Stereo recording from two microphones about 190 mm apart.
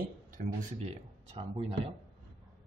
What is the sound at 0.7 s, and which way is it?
Speech, 35° right (ahead or behind).